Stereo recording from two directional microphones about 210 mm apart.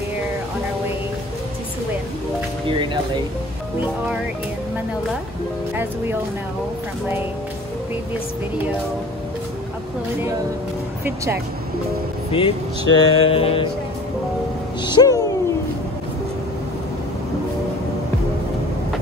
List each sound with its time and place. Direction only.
12.3 s speech: 25° left (ahead or behind)
14.8 s speech: 20° left (ahead or behind)